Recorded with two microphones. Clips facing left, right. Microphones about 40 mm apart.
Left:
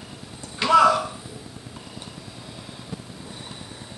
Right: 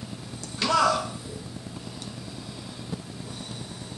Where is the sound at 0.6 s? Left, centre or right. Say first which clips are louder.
Left 6 dB; centre.